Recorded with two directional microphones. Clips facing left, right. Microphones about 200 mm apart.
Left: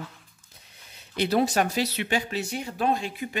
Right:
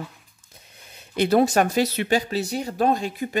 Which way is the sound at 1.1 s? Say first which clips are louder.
Right 5 dB; 50° right (ahead or behind).